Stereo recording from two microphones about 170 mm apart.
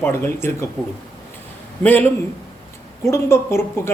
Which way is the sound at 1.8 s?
10° left (ahead or behind).